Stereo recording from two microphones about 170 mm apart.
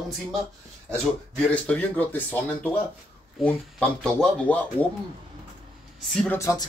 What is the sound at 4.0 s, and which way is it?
Speech, 5° left (ahead or behind).